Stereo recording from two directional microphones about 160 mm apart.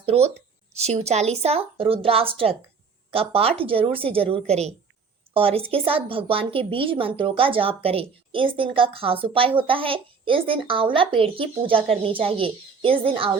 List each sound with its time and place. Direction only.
0.0 s a woman's voice: 40° right (ahead or behind)